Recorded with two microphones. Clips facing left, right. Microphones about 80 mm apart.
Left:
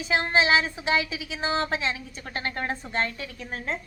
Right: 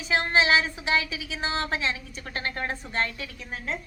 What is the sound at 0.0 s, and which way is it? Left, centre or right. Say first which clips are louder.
A woman's voice: even; left.